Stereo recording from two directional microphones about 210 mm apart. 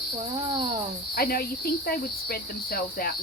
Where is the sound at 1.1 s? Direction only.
45° left (ahead or behind).